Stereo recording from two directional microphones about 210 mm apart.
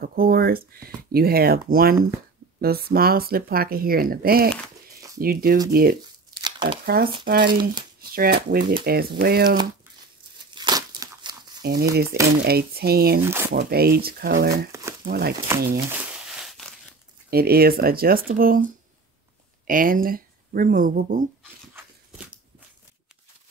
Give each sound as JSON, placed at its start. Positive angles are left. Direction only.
{"t": 0.0, "sound": "speech", "side_deg": -45}
{"t": 6.3, "sound": "crumpling", "side_deg": -25}
{"t": 7.2, "sound": "speech", "side_deg": -45}
{"t": 10.5, "sound": "crumpling", "side_deg": -20}
{"t": 11.9, "sound": "speech", "side_deg": -45}
{"t": 13.2, "sound": "speech", "side_deg": -10}
{"t": 13.5, "sound": "speech", "side_deg": -50}
{"t": 14.7, "sound": "crumpling", "side_deg": -15}
{"t": 15.0, "sound": "speech", "side_deg": -50}
{"t": 15.3, "sound": "speech", "side_deg": -10}
{"t": 15.9, "sound": "a sound", "side_deg": -5}
{"t": 17.3, "sound": "speech", "side_deg": -45}